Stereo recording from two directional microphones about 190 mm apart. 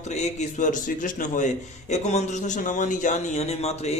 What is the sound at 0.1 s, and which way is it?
A man's voice, 35° left (ahead or behind).